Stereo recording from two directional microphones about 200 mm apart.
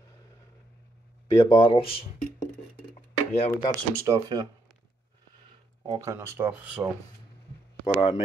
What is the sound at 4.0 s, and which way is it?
Speech, 15° right (ahead or behind).